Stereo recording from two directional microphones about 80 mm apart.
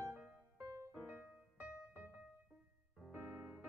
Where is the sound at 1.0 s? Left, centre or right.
Right.